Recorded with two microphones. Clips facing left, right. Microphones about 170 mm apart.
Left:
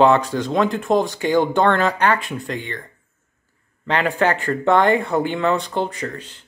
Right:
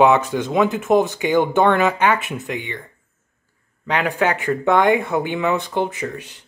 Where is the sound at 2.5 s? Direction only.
20° right (ahead or behind).